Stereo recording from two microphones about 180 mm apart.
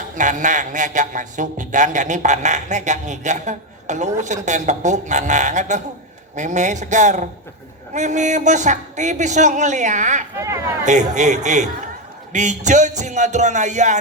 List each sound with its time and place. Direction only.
0.2 s a man's voice: 45° right (ahead or behind)
10.3 s speech: 15° right (ahead or behind)
10.8 s speech: 40° right (ahead or behind)